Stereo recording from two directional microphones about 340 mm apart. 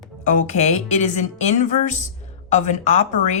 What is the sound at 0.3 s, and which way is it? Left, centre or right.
A woman's voice, left.